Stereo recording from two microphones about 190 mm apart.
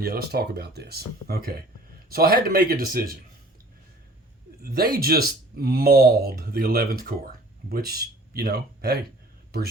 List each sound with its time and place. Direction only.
0.0 s speech: 55° right (ahead or behind)
4.6 s speech: 50° right (ahead or behind)